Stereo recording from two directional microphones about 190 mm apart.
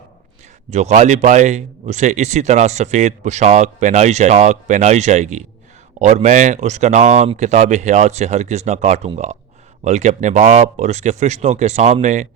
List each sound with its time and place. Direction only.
0.7 s speech: 35° right (ahead or behind)